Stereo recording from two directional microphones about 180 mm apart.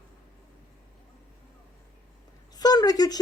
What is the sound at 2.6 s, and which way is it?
Speech, 20° left (ahead or behind).